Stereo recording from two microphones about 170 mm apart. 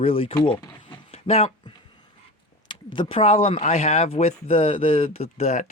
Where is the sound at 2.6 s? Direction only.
30° left (ahead or behind).